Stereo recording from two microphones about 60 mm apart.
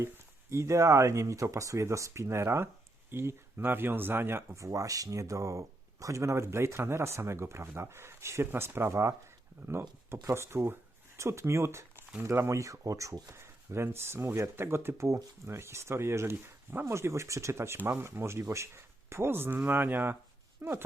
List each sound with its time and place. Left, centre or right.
0.5 s speech: right
4.5 s speech: right
9.6 s speech: right